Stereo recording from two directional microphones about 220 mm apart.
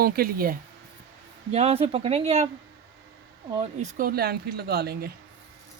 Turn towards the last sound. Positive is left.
turn(degrees=-45)  # may be behind; listen again after turning